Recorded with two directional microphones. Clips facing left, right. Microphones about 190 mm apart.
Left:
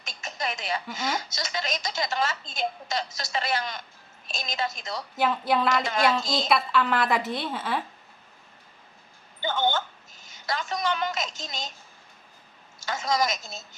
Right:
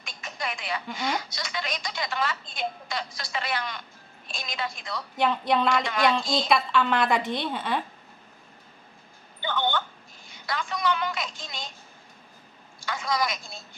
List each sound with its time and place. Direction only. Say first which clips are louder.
0.0 s a sound: left 2 dB; 45° left (ahead or behind)
0.9 s a woman's voice: even; 45° left (ahead or behind)
5.1 s a woman's voice: right 1 dB; 5° left (ahead or behind)
9.4 s a woman's voice: left 2 dB; 45° left (ahead or behind)
12.8 s a woman's voice: left 2 dB; 45° left (ahead or behind)